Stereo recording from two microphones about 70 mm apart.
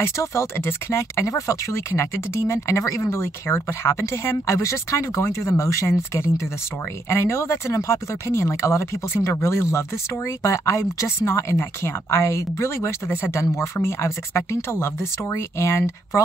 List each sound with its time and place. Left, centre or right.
0.0 s speech: left